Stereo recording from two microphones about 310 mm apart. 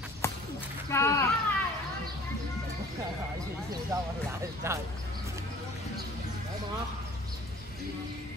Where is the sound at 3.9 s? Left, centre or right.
Centre.